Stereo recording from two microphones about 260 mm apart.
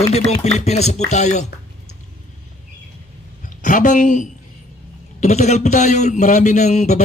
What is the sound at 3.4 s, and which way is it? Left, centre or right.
A woman's voice, left.